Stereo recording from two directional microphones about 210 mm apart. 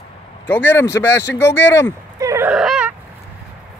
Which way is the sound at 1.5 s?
60° left (ahead or behind).